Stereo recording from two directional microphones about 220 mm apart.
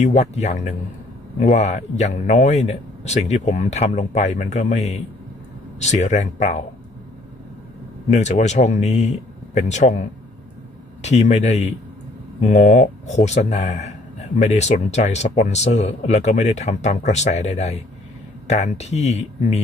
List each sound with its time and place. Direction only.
0.0 s a man's voice: 30° left (ahead or behind)
8.1 s a man's voice: 30° left (ahead or behind)